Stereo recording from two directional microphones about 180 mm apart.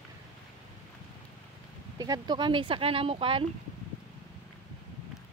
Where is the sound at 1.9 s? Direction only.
20° right (ahead or behind).